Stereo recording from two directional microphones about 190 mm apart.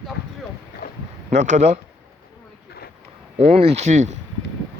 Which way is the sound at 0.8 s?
45° left (ahead or behind).